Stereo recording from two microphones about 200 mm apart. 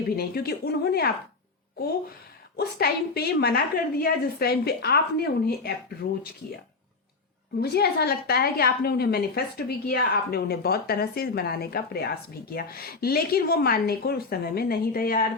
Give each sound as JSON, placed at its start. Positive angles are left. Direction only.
{"t": 0.2, "sound": "a woman's voice", "side_deg": 50}
{"t": 2.6, "sound": "a woman's voice", "side_deg": 50}
{"t": 7.6, "sound": "a woman's voice", "side_deg": 50}